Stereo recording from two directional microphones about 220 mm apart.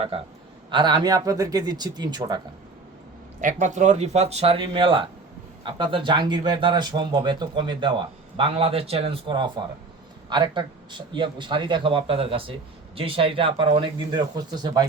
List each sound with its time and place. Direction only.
0.7 s a man's voice: 20° right (ahead or behind)
3.4 s speech: 35° right (ahead or behind); by 14.8 s 20° right (ahead or behind)